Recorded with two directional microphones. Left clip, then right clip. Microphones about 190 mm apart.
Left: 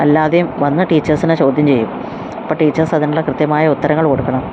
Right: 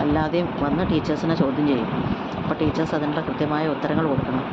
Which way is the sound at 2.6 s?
30° left (ahead or behind).